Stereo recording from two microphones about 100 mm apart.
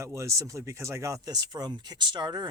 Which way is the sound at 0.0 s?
30° right (ahead or behind).